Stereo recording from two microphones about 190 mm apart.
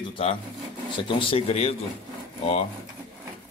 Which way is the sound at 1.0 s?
30° left (ahead or behind).